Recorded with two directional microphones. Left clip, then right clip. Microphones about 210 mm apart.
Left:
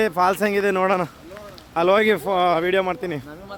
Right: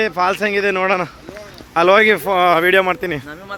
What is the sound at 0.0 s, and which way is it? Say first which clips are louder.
Speech: right 2 dB; 30° left (ahead or behind).